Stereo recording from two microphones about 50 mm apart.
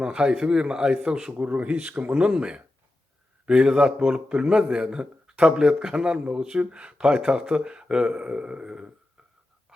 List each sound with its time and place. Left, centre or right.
0.0 s a man's voice: centre
1.3 s a man's voice: right